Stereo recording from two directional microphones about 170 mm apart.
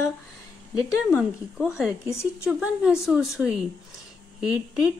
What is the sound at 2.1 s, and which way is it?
Speech, 15° left (ahead or behind).